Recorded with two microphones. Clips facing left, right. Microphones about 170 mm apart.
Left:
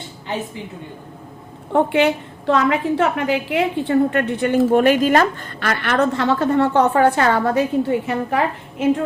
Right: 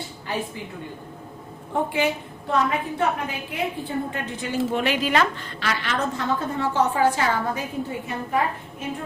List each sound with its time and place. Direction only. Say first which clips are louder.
1.7 s a woman's voice: left 7 dB; 70° left (ahead or behind)